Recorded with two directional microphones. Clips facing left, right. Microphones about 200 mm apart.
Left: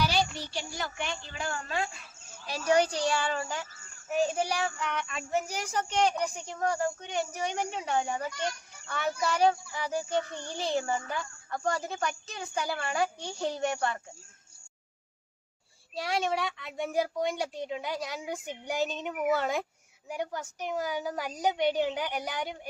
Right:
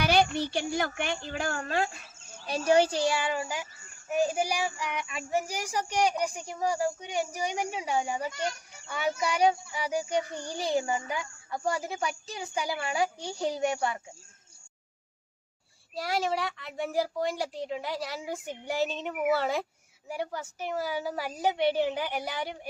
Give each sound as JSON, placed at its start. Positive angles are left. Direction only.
{"t": 0.0, "sound": "speech", "side_deg": -55}
{"t": 2.5, "sound": "a child's voice", "side_deg": -35}
{"t": 3.1, "sound": "a child's voice", "side_deg": -15}
{"t": 16.0, "sound": "a woman's voice", "side_deg": 0}
{"t": 18.3, "sound": "speech", "side_deg": 15}
{"t": 19.1, "sound": "a woman's voice", "side_deg": -5}